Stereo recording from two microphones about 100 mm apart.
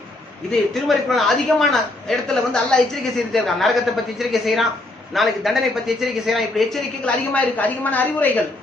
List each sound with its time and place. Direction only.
0.5 s a man's voice: centre (ahead or behind)
7.0 s a woman's voice: 15° left (ahead or behind)